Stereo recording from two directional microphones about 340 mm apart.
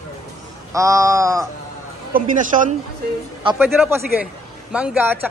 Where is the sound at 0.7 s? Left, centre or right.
Centre.